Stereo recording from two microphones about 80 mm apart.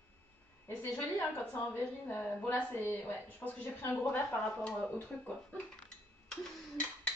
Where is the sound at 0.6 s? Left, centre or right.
Left.